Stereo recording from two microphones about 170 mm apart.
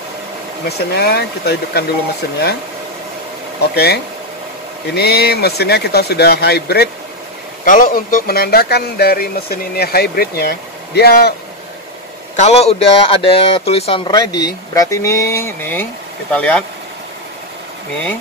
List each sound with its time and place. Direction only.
0.7 s speech: 70° left (ahead or behind)
3.7 s speech: 70° left (ahead or behind)
7.6 s speech: 50° left (ahead or behind); by 11.3 s 70° left (ahead or behind)
12.4 s speech: 40° left (ahead or behind); by 16.6 s 10° left (ahead or behind)